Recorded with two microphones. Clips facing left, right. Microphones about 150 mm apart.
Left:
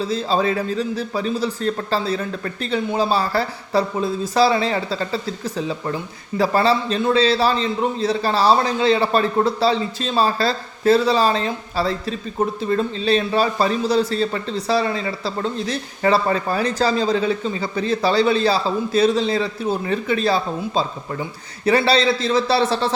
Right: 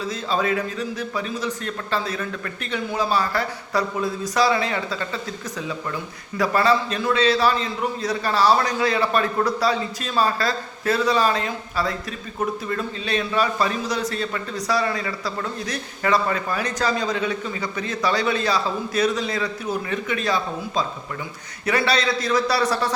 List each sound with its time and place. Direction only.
0.0 s a man's voice: 30° left (ahead or behind)